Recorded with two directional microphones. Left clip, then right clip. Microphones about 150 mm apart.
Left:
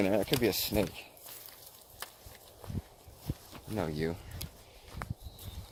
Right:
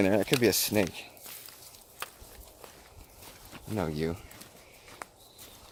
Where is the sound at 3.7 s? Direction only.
35° right (ahead or behind).